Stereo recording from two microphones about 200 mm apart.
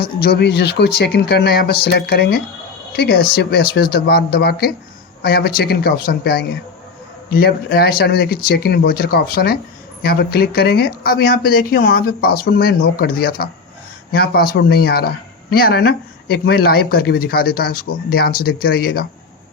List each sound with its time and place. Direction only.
0.0 s speech: 50° left (ahead or behind)